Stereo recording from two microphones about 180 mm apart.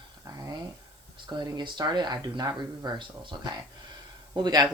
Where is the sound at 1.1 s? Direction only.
25° right (ahead or behind).